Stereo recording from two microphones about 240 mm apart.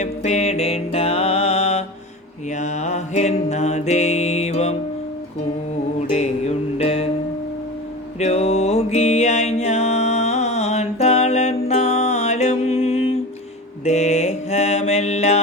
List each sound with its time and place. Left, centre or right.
0.0 s music: left
6.1 s music: left
8.2 s music: left
13.8 s mantra: left